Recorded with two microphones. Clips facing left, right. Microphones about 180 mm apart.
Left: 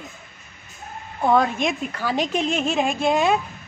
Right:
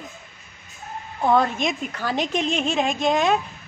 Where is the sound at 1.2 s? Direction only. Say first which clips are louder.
Left 1 dB; 5° left (ahead or behind).